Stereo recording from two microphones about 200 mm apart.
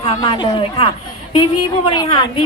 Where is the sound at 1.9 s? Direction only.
20° left (ahead or behind).